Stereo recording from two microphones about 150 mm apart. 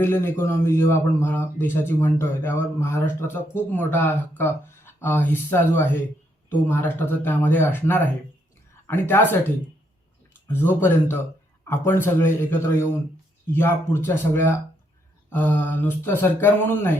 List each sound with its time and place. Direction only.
0.0 s a man's voice: 15° left (ahead or behind)
10.5 s a man's voice: 15° left (ahead or behind)